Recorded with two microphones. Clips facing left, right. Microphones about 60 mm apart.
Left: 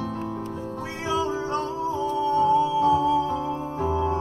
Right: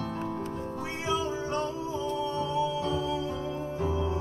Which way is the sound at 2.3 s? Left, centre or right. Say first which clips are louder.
Left 13 dB; left.